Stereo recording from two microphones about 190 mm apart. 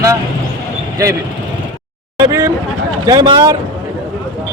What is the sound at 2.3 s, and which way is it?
Speech, 15° right (ahead or behind).